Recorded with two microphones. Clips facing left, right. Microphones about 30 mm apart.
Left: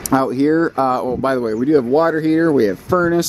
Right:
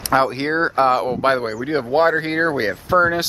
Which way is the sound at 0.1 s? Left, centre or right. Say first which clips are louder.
Left 3 dB; right.